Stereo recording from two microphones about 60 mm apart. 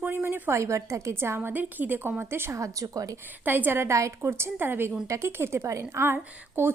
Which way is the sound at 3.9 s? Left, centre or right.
Right.